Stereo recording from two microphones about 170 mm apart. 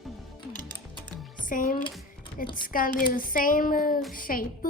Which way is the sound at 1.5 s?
55° left (ahead or behind).